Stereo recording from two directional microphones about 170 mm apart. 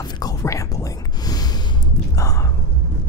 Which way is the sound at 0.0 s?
20° left (ahead or behind).